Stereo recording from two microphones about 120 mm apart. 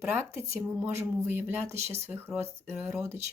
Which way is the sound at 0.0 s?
20° right (ahead or behind).